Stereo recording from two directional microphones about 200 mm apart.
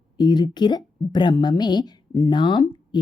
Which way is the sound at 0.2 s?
20° left (ahead or behind).